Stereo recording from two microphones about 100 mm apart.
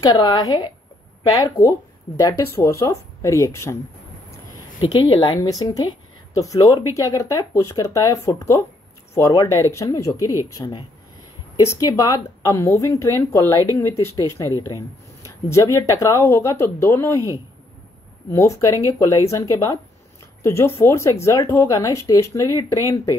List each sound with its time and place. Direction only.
0.0 s a woman's voice: 40° left (ahead or behind)
5.0 s a woman's voice: 65° left (ahead or behind)
5.4 s a woman's voice: 40° left (ahead or behind)
18.3 s a woman's voice: 30° left (ahead or behind)